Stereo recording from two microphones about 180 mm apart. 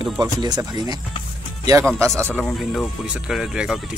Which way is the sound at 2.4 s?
Centre (ahead or behind).